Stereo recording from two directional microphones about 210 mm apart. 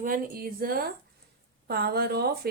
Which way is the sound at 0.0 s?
40° right (ahead or behind).